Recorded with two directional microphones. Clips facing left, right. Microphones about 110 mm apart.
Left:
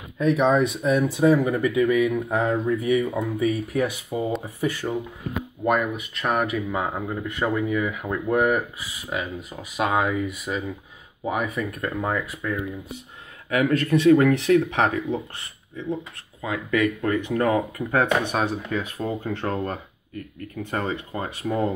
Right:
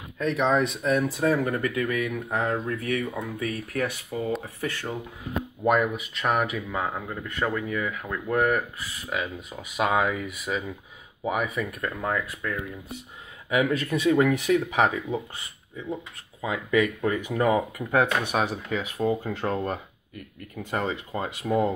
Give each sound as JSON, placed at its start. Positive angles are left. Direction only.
{"t": 0.2, "sound": "speech", "side_deg": 5}
{"t": 5.6, "sound": "speech", "side_deg": 0}
{"t": 6.7, "sound": "speech", "side_deg": 15}
{"t": 13.5, "sound": "speech", "side_deg": -10}